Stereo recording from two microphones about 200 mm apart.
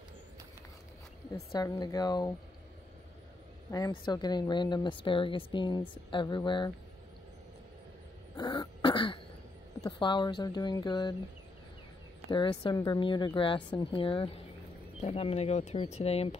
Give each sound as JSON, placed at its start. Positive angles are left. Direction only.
{"t": 1.5, "sound": "a woman's voice", "side_deg": 20}
{"t": 3.7, "sound": "a woman's voice", "side_deg": 20}
{"t": 8.4, "sound": "cough", "side_deg": 20}
{"t": 9.8, "sound": "a woman's voice", "side_deg": 25}
{"t": 12.3, "sound": "a woman's voice", "side_deg": 25}